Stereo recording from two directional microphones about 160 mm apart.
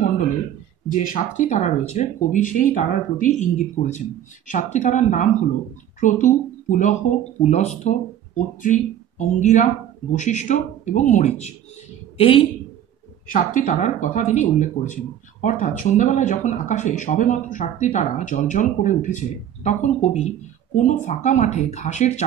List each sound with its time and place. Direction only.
1.0 s speech: 55° left (ahead or behind)
9.4 s a woman's voice: 50° left (ahead or behind)
13.3 s speech: 55° left (ahead or behind)